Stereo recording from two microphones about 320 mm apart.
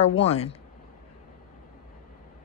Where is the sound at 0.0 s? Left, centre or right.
Centre.